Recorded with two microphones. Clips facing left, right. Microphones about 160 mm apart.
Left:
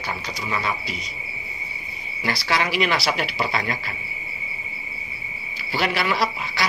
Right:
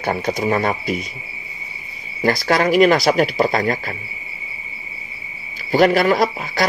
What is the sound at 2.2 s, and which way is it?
A man's voice, 50° right (ahead or behind).